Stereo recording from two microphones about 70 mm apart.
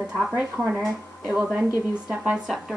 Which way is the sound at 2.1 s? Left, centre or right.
Centre.